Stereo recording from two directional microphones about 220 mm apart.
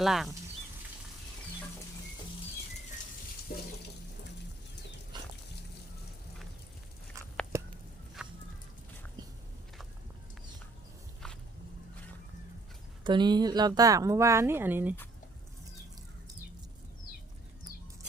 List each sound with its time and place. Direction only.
0.0 s speech: centre (ahead or behind)
3.5 s water: 50° left (ahead or behind)
5.1 s dog: 20° right (ahead or behind)
8.2 s a sound: 5° right (ahead or behind)
11.2 s walk: 5° left (ahead or behind)
13.1 s speech: 20° right (ahead or behind)